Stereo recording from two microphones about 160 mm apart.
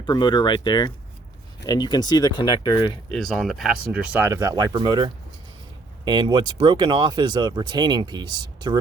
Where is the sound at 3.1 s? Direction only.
Centre (ahead or behind).